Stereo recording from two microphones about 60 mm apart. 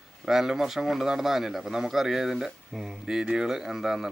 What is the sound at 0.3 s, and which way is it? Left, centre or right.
Speech, centre.